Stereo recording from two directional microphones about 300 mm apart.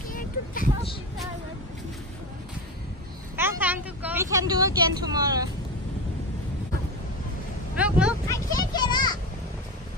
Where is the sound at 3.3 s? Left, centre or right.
Centre.